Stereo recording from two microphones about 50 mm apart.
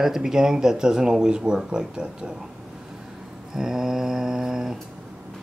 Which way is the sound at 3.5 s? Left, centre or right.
Centre.